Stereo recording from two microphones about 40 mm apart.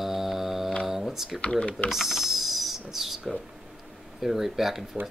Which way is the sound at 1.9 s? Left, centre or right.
Centre.